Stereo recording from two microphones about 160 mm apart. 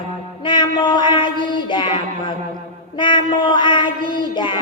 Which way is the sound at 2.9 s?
30° left (ahead or behind).